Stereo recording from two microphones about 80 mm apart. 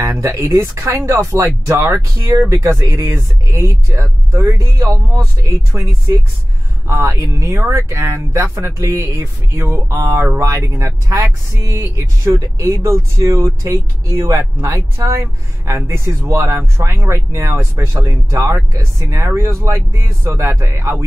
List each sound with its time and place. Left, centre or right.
0.0 s speech: right
2.3 s speech: right
2.8 s speech: right
9.7 s speech: right